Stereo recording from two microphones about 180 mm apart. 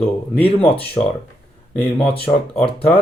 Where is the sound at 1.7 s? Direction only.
5° left (ahead or behind).